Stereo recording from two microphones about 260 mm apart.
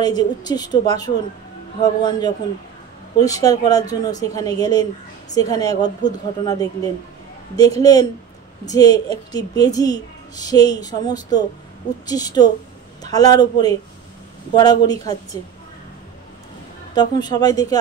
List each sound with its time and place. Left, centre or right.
0.0 s a woman's voice: centre
16.9 s a woman's voice: centre